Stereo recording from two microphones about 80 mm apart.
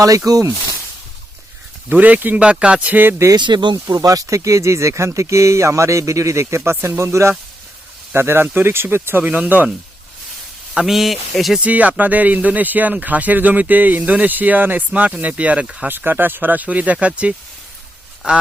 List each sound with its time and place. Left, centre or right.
0.3 s speech: right
1.9 s speech: right
3.3 s speech: right
3.8 s speech: right
10.8 s speech: centre
11.6 s speech: centre
15.9 s speech: right